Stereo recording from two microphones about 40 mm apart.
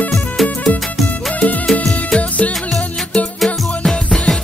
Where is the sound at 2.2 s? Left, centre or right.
Left.